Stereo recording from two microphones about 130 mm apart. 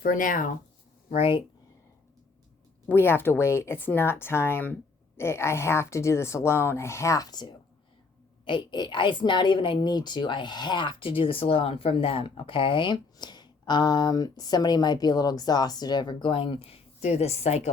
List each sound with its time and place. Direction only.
0.0 s speech: 90° left
1.1 s speech: 45° left (ahead or behind)
2.9 s a woman's voice: 15° left (ahead or behind); by 17.7 s 55° left (ahead or behind)